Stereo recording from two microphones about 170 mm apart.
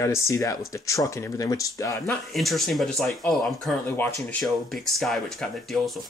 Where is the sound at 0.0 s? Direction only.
15° left (ahead or behind).